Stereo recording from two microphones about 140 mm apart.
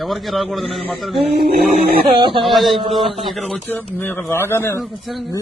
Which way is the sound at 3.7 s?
15° left (ahead or behind).